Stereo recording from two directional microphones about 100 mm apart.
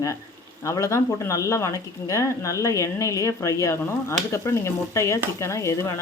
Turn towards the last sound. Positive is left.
turn(degrees=30)  # may be behind; listen again after turning